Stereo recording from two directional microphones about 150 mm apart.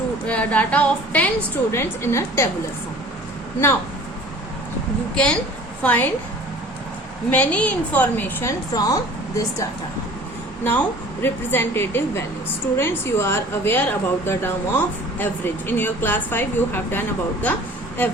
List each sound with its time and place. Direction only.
0.3 s a woman's voice: 10° left (ahead or behind)
5.1 s a woman's voice: 5° left (ahead or behind)
7.3 s a woman's voice: 10° left (ahead or behind)
8.7 s a woman's voice: 25° left (ahead or behind)
18.0 s a woman's voice: 15° left (ahead or behind)